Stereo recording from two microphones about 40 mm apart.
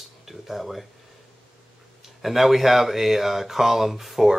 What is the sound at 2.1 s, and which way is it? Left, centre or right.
Speech, centre.